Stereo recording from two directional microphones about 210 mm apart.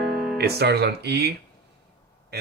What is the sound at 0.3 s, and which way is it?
Speech, 50° right (ahead or behind).